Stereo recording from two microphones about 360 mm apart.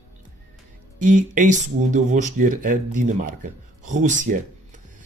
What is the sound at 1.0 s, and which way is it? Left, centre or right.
Speech, right.